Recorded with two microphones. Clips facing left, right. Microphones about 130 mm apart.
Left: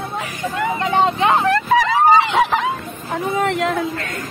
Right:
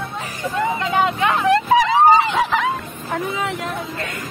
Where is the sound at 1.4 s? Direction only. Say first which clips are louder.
Right 1 dB; 20° right (ahead or behind).